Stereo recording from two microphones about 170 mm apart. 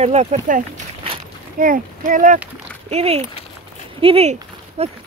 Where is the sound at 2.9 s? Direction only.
35° right (ahead or behind).